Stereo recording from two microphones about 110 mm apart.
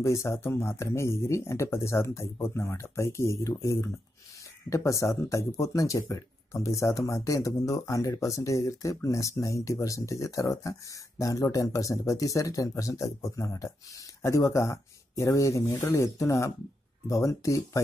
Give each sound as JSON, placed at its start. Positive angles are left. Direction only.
{"t": 0.0, "sound": "speech", "side_deg": 25}